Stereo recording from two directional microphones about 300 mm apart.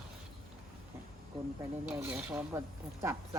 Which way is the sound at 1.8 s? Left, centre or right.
Centre.